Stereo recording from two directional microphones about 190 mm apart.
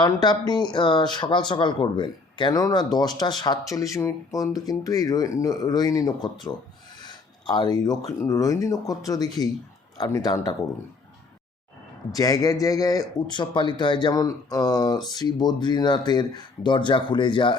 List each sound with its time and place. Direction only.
0.0 s speech: 20° left (ahead or behind)
12.1 s speech: 20° left (ahead or behind)